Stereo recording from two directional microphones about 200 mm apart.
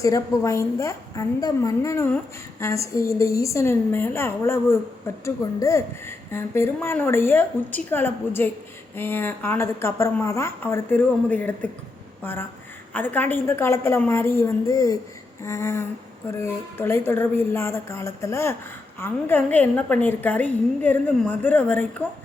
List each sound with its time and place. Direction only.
0.0 s a woman's voice: 15° left (ahead or behind)